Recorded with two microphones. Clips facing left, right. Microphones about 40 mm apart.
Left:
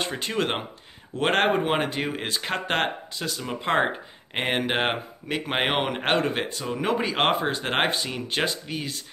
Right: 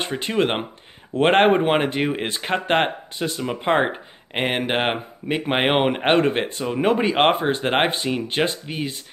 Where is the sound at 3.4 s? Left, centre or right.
Centre.